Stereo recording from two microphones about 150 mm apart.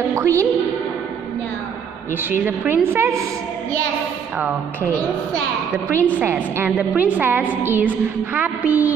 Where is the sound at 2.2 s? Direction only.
15° right (ahead or behind).